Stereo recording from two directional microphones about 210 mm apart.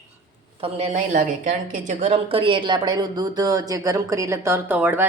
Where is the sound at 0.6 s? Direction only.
30° right (ahead or behind).